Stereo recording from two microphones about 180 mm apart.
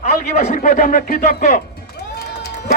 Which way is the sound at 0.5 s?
50° left (ahead or behind).